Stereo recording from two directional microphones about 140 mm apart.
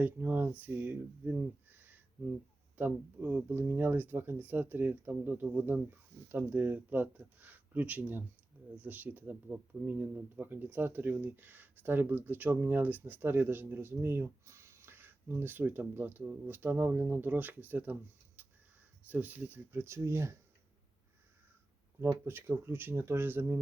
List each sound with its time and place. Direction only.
0.0 s speech: 10° right (ahead or behind)
18.4 s a sound: 15° right (ahead or behind)
19.0 s speech: 10° right (ahead or behind)
22.0 s speech: 15° right (ahead or behind)